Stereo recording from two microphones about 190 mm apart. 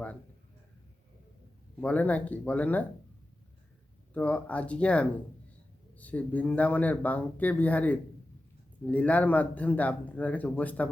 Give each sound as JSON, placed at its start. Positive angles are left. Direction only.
{"t": 1.8, "sound": "speech", "side_deg": 10}
{"t": 4.1, "sound": "speech", "side_deg": 10}